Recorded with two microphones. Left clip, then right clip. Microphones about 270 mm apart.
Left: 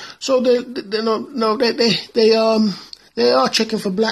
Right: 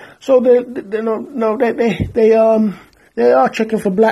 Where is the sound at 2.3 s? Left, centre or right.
Left.